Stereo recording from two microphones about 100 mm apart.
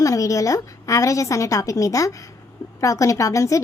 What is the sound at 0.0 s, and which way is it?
A woman's voice, 35° left (ahead or behind).